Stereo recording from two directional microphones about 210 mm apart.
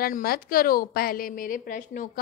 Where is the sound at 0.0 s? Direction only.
45° left (ahead or behind).